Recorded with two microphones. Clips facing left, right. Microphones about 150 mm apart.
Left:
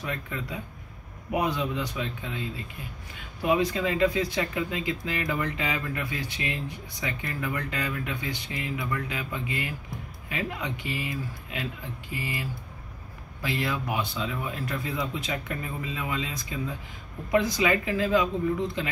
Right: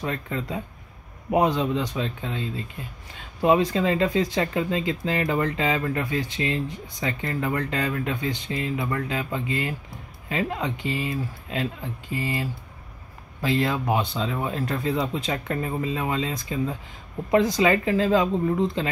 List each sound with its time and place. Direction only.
0.0 s speech: 35° right (ahead or behind)